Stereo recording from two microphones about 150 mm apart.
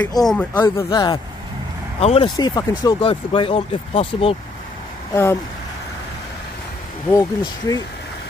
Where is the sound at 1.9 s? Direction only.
40° left (ahead or behind).